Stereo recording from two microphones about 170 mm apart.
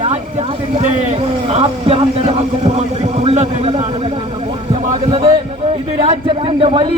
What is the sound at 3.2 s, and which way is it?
Speech, 40° right (ahead or behind).